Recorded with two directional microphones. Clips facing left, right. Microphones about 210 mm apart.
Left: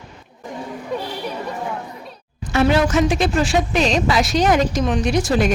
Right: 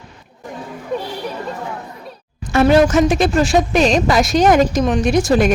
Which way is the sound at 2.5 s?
45° right (ahead or behind).